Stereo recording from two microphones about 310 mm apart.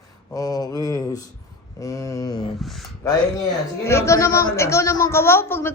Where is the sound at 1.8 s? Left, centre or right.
Centre.